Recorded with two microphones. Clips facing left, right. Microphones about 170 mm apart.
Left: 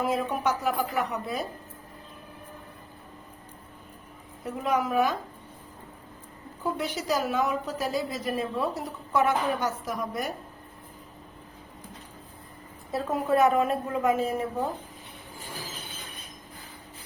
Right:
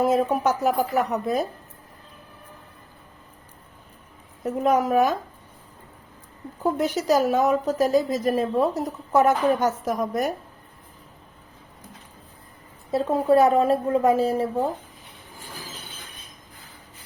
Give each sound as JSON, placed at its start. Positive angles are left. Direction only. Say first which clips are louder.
{"t": 0.0, "sound": "a woman's voice", "louder": "right 6 dB", "side_deg": -40}
{"t": 4.4, "sound": "a woman's voice", "louder": "right 6 dB", "side_deg": -45}
{"t": 6.6, "sound": "a woman's voice", "louder": "right 7 dB", "side_deg": -45}
{"t": 12.9, "sound": "a woman's voice", "louder": "right 6 dB", "side_deg": -25}